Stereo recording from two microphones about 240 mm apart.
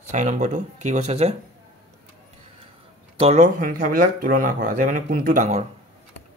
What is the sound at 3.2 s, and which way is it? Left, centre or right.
Speech, right.